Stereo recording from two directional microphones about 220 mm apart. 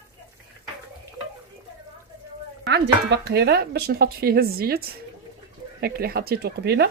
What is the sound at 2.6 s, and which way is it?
Speech, 50° right (ahead or behind).